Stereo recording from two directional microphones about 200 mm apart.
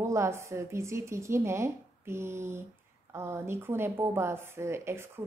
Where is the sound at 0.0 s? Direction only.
15° right (ahead or behind).